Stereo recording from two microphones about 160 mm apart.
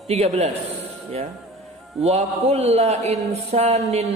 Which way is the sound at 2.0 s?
40° right (ahead or behind).